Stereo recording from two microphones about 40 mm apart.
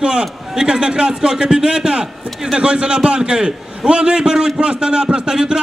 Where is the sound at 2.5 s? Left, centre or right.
Right.